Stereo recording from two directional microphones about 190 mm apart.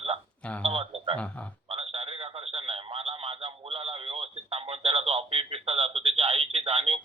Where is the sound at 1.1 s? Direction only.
5° left (ahead or behind).